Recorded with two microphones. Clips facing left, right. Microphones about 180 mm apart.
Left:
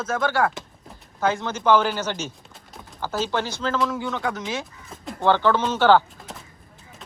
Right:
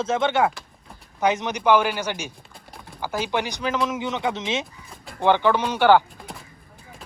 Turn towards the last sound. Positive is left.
turn(degrees=-15)  # may be behind; listen again after turning